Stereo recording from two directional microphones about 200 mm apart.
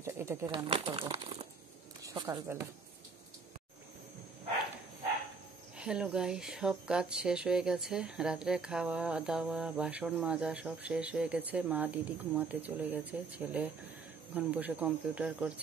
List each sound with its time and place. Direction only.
0.0 s pigeon: 15° right (ahead or behind)
0.5 s speech: 25° right (ahead or behind); by 2.7 s 10° right (ahead or behind)
5.8 s speech: 5° right (ahead or behind)